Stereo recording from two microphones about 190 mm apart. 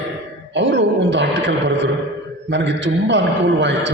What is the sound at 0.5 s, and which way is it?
A man's voice, 70° right (ahead or behind).